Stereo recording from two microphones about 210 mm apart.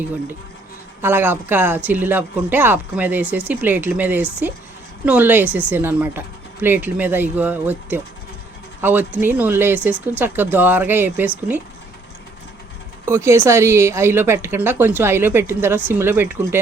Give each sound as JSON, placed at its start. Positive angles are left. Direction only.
{"t": 1.0, "sound": "speech", "side_deg": -10}
{"t": 13.1, "sound": "speech", "side_deg": -15}